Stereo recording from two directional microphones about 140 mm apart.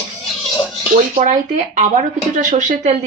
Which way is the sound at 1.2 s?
60° right (ahead or behind).